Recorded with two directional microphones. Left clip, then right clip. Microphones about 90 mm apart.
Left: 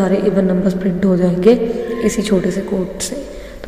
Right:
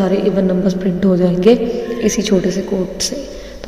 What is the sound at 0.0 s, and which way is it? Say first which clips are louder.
A woman's voice: even; 10° right (ahead or behind).